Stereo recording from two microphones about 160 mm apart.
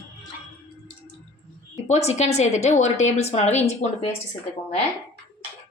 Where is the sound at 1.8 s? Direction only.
45° left (ahead or behind).